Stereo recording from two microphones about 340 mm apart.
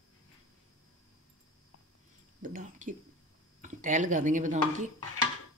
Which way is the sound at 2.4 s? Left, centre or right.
Right.